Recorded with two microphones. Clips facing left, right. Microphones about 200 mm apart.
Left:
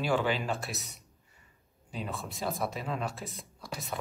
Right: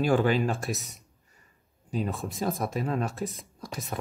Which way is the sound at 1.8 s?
45° right (ahead or behind).